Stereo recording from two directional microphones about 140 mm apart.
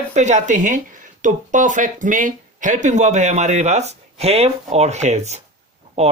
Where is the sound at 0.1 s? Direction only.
55° right (ahead or behind).